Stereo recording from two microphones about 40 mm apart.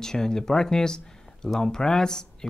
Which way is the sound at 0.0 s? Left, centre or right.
Centre.